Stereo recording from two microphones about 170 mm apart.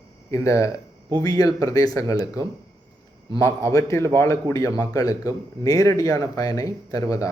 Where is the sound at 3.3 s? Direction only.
20° left (ahead or behind).